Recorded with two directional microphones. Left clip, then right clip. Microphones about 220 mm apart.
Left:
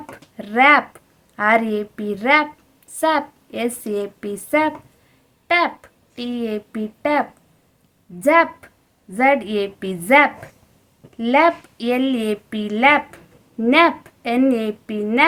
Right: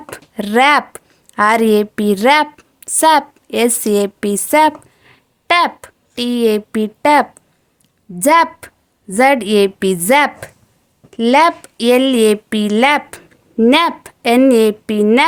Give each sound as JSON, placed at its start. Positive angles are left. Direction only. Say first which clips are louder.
{"t": 0.1, "sound": "speech", "louder": "right 10 dB", "side_deg": -50}